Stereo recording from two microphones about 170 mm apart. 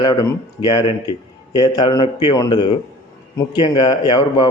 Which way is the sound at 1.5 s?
25° left (ahead or behind).